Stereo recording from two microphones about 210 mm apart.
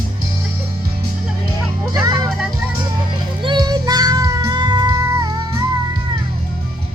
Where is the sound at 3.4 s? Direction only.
20° right (ahead or behind).